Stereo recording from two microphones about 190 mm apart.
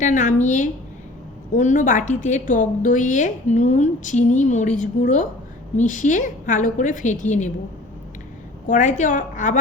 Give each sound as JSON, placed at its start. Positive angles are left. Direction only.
{"t": 0.0, "sound": "a woman's voice", "side_deg": 40}
{"t": 8.6, "sound": "a woman's voice", "side_deg": 40}